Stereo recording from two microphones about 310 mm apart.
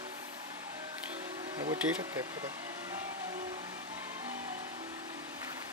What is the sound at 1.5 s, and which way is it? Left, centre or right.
Speech, centre.